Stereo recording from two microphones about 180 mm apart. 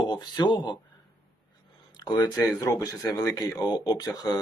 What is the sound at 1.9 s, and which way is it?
Speech, 25° left (ahead or behind).